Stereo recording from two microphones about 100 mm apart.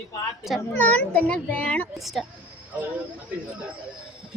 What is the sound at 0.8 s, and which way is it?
A child's voice, 15° left (ahead or behind).